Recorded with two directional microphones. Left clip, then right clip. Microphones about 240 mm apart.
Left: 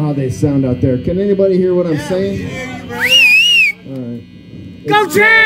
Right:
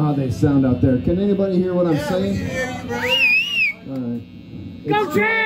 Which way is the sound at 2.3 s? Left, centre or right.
Right.